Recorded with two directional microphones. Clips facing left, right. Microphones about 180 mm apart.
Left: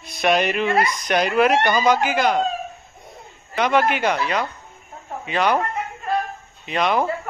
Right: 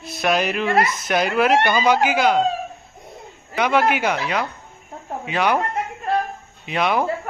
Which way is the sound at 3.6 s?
10° right (ahead or behind).